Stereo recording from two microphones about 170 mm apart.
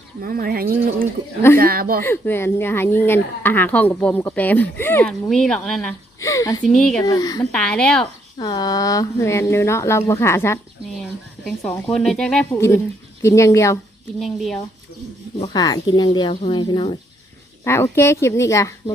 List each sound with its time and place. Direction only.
0.2 s speech: 60° right (ahead or behind)
2.0 s speech: 15° left (ahead or behind)
6.1 s speech: 20° left (ahead or behind)
6.7 s speech: 5° left (ahead or behind)
7.0 s speech: 20° left (ahead or behind)
7.5 s speech: 5° left (ahead or behind)
8.4 s speech: 25° left (ahead or behind)
11.0 s speech: 5° left (ahead or behind)
12.5 s speech: 15° left (ahead or behind)
14.2 s speech: centre (ahead or behind)
15.5 s speech: 25° left (ahead or behind)
17.6 s speech: 15° left (ahead or behind)